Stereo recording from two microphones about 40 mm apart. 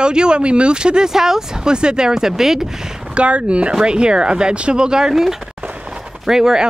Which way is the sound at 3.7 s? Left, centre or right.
Right.